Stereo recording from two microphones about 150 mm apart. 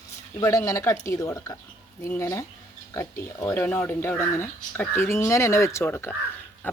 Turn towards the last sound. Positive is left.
turn(degrees=10)  # may be behind; listen again after turning